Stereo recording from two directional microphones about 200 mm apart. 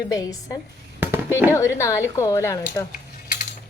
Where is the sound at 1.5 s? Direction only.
15° left (ahead or behind).